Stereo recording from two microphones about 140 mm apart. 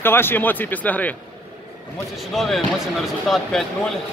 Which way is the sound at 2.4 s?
Centre (ahead or behind).